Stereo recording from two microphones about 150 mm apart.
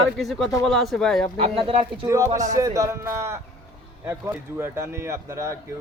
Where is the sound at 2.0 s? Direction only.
20° right (ahead or behind).